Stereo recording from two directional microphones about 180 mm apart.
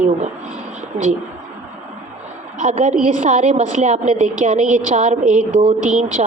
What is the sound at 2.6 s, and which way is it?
A woman's voice, 45° right (ahead or behind).